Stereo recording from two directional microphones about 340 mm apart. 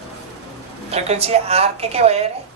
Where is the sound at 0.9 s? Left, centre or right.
Centre.